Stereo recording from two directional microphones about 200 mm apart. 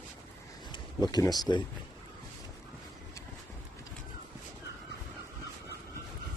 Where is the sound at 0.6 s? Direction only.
20° left (ahead or behind).